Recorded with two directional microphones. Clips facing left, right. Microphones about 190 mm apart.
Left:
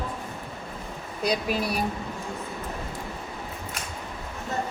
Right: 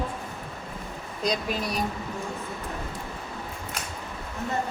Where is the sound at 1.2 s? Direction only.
10° left (ahead or behind).